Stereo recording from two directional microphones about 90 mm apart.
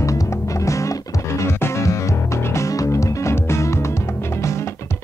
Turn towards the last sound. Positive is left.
turn(degrees=30)  # may be behind; listen again after turning